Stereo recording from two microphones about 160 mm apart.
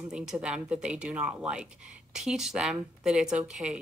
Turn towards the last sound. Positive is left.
turn(degrees=-5)  # may be behind; listen again after turning